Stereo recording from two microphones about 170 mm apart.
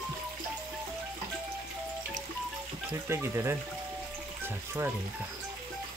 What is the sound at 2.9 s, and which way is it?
Speech, 15° right (ahead or behind).